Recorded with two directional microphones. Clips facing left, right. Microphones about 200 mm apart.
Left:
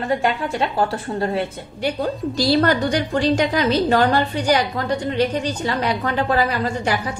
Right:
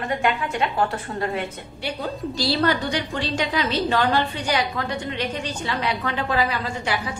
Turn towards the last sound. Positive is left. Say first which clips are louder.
# left 5 dB
turn(degrees=45)  # may be behind; listen again after turning